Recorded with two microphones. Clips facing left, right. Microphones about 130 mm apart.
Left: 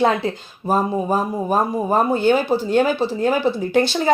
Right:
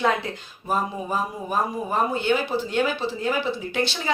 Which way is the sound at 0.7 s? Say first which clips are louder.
Left 7 dB; 40° left (ahead or behind).